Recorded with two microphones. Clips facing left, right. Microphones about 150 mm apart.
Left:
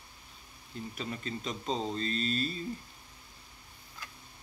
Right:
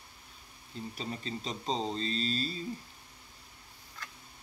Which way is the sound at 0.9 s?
35° right (ahead or behind).